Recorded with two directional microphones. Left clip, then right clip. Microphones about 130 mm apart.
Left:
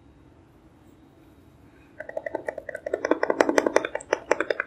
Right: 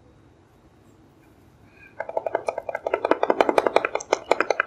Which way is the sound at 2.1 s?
25° right (ahead or behind).